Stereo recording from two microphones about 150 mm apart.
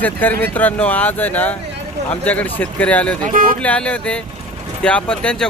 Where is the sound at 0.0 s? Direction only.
10° left (ahead or behind).